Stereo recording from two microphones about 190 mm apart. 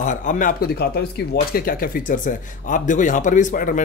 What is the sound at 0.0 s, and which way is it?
Speech, 40° left (ahead or behind).